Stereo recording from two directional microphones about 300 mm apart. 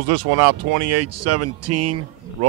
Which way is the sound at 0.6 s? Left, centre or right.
Right.